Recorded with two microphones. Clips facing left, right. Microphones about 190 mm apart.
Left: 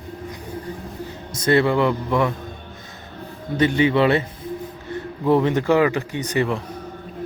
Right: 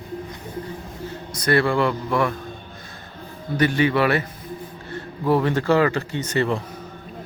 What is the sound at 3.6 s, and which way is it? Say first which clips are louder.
Speech: left 2 dB; 20° left (ahead or behind).